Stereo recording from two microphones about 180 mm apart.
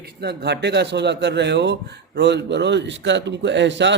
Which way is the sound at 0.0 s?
65° right (ahead or behind).